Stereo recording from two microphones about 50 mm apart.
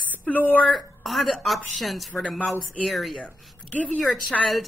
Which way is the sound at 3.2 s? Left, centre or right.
Left.